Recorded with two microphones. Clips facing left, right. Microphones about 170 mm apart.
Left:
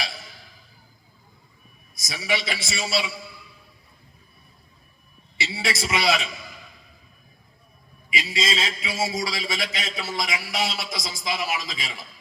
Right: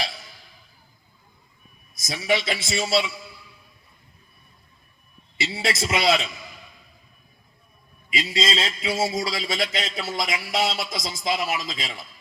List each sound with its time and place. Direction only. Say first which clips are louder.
2.0 s a man's voice: right 4 dB; 50° right (ahead or behind)
5.4 s a man's voice: right 2 dB; 50° right (ahead or behind)
8.1 s a man's voice: right 2 dB; 50° right (ahead or behind)